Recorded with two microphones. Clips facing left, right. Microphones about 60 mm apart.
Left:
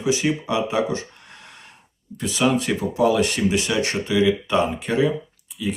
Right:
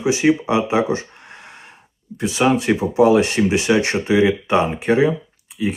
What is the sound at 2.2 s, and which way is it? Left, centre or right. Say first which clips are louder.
Speech: right 3 dB; right.